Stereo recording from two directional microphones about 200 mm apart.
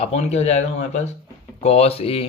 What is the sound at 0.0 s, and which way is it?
Speech, 35° left (ahead or behind).